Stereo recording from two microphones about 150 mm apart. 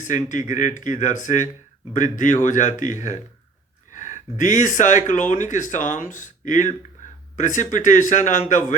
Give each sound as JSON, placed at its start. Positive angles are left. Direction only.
{"t": 0.0, "sound": "speech", "side_deg": 60}
{"t": 3.9, "sound": "speech", "side_deg": 55}